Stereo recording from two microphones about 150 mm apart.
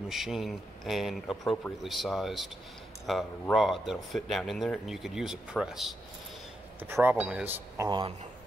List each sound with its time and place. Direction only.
0.1 s speech: centre (ahead or behind)
6.8 s speech: 15° right (ahead or behind)
7.8 s speech: 20° right (ahead or behind)